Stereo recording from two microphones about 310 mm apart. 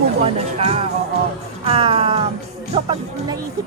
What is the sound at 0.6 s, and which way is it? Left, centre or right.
Speech, centre.